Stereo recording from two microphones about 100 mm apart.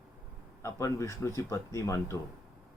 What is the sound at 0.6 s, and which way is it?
Speech, 30° left (ahead or behind).